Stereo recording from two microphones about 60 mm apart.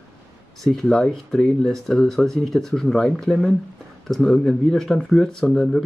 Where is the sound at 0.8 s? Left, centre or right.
Centre.